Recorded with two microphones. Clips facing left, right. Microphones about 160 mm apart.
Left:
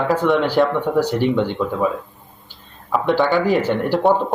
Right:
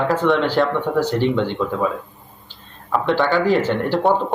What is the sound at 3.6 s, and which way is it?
Speech, 15° left (ahead or behind).